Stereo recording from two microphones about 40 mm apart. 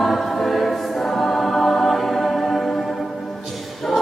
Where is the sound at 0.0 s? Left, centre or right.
Centre.